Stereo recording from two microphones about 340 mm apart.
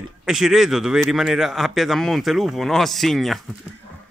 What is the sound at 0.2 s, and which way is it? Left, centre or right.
Speech, centre.